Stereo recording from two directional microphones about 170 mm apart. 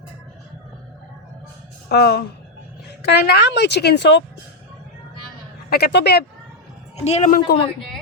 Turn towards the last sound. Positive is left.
turn(degrees=55)  # may be behind; listen again after turning